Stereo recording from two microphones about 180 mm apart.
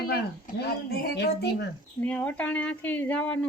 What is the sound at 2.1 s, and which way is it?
Speech, 10° left (ahead or behind).